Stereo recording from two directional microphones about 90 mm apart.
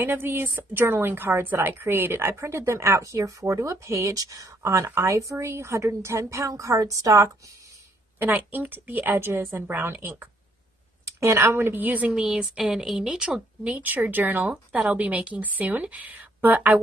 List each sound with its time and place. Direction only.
0.0 s a woman's voice: 25° right (ahead or behind)
8.2 s speech: 20° right (ahead or behind)
12.1 s speech: 5° right (ahead or behind)